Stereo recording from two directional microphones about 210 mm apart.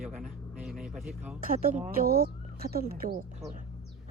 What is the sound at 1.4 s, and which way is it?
Speech, 40° right (ahead or behind).